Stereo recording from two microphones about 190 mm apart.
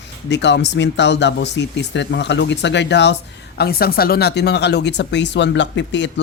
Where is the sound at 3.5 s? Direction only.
55° left (ahead or behind).